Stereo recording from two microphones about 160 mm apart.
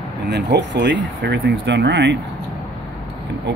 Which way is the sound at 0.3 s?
90° right.